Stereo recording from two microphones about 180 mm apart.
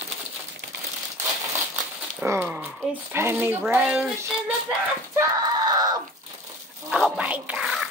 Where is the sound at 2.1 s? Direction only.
10° right (ahead or behind).